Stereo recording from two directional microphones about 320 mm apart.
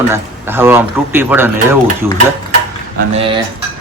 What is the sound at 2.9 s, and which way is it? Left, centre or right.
Speech, centre.